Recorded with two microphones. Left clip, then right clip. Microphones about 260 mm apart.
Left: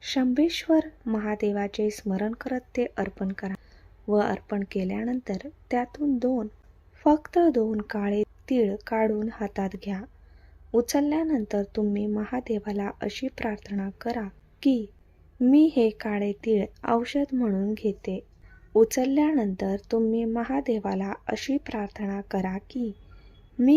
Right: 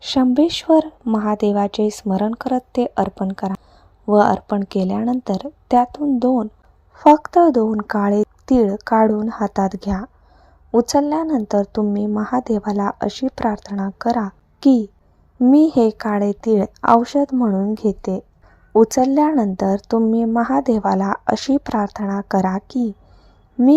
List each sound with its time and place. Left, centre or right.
0.0 s a woman's voice: centre
9.0 s a woman's voice: centre
12.4 s a woman's voice: centre